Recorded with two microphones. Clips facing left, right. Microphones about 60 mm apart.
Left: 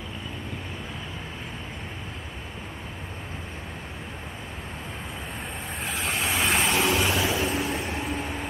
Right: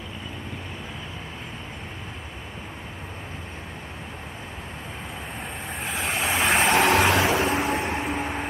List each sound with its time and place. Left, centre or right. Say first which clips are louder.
5.9 s vehicle: right 2 dB; centre
6.7 s vehicle: right 5 dB; right
8.0 s train: right 3 dB; right